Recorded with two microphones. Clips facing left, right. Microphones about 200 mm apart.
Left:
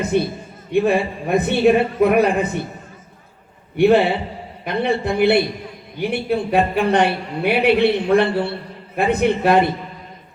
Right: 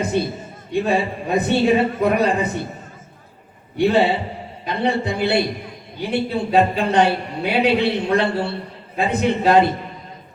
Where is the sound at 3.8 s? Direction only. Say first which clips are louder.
Left 3 dB; 60° left (ahead or behind).